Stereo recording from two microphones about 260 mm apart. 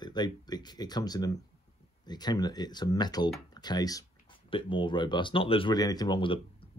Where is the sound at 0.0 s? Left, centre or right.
Centre.